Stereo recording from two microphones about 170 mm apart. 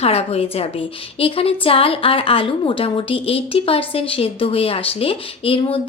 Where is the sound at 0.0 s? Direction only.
35° left (ahead or behind).